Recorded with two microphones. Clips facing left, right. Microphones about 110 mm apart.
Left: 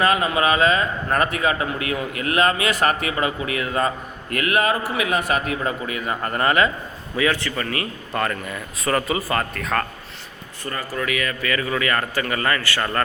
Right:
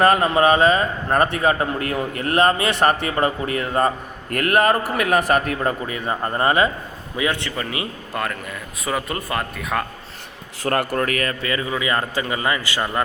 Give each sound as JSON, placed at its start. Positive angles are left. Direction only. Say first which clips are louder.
{"t": 0.0, "sound": "a man's voice", "louder": "right 4 dB", "side_deg": -45}
{"t": 5.8, "sound": "speech", "louder": "right 1 dB", "side_deg": -35}
{"t": 8.1, "sound": "speech", "louder": "left 3 dB", "side_deg": 0}
{"t": 10.6, "sound": "speech", "louder": "right 9 dB", "side_deg": -75}
{"t": 10.9, "sound": "a man's voice", "louder": "right 3 dB", "side_deg": -45}
{"t": 11.4, "sound": "a man's voice", "louder": "even", "side_deg": -25}